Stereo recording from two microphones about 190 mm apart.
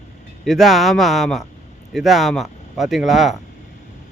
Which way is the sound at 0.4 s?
Centre (ahead or behind).